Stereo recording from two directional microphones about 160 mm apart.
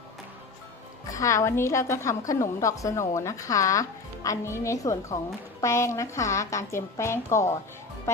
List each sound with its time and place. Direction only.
1.1 s speech: 20° left (ahead or behind)